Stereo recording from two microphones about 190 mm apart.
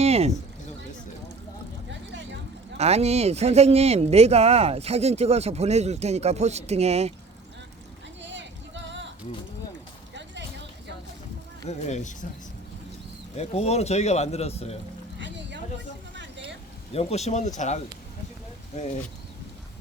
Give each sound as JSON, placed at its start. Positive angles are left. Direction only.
{"t": 0.0, "sound": "a sound", "side_deg": -35}
{"t": 2.7, "sound": "speech", "side_deg": -35}
{"t": 8.2, "sound": "music", "side_deg": -70}
{"t": 11.7, "sound": "speech", "side_deg": 40}
{"t": 13.3, "sound": "speech", "side_deg": 35}
{"t": 15.2, "sound": "clip-clop", "side_deg": -70}
{"t": 16.9, "sound": "speech", "side_deg": 30}